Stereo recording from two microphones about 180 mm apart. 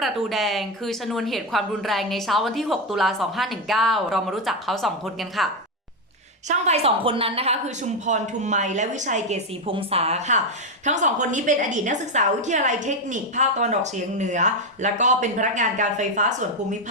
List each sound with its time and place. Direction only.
0.0 s a woman's voice: centre (ahead or behind)
6.5 s a woman's voice: 35° right (ahead or behind)